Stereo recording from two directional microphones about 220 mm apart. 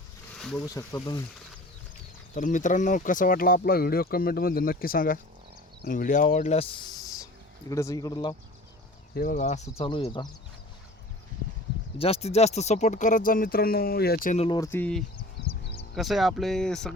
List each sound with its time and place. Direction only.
0.3 s bee: centre (ahead or behind)
0.6 s speech: 15° left (ahead or behind)
2.3 s speech: 35° left (ahead or behind)
7.7 s speech: 15° left (ahead or behind)
9.1 s speech: 40° left (ahead or behind); by 10.2 s 20° left (ahead or behind)
11.9 s speech: 25° left (ahead or behind)
14.6 s speech: 10° left (ahead or behind)